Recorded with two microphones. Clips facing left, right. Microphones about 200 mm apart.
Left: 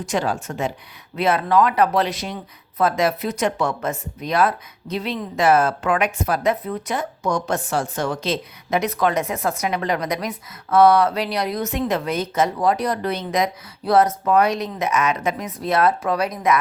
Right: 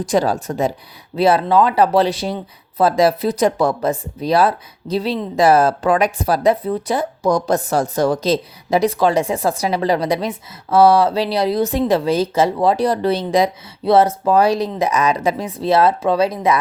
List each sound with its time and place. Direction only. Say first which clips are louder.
0.0 s speech: right 6 dB; 35° right (ahead or behind)